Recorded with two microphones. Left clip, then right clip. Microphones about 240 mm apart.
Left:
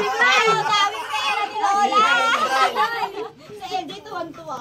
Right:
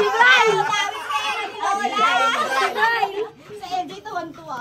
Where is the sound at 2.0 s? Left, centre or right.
Centre.